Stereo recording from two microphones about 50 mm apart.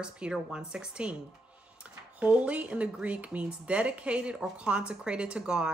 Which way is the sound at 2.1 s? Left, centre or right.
Right.